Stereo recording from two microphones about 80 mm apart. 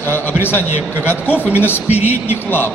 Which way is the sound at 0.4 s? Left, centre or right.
Left.